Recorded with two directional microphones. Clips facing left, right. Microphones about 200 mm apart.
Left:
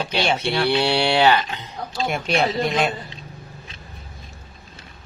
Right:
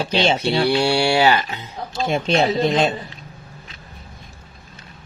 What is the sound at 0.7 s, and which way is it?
Speech, 10° right (ahead or behind).